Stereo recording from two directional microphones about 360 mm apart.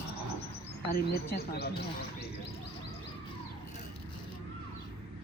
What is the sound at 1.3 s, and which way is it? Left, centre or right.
Speech, left.